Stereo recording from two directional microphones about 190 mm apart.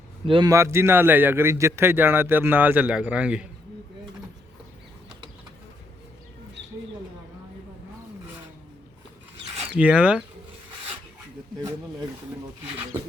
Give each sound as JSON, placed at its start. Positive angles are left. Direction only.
{"t": 0.3, "sound": "a man's voice", "side_deg": -25}
{"t": 0.5, "sound": "a man's voice", "side_deg": -15}
{"t": 9.7, "sound": "a man's voice", "side_deg": -5}